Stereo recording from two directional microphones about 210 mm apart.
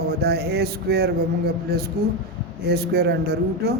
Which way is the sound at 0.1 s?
50° right (ahead or behind).